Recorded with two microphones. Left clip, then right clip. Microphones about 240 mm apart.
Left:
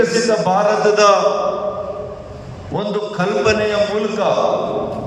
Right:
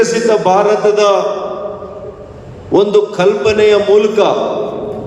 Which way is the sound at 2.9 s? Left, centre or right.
Right.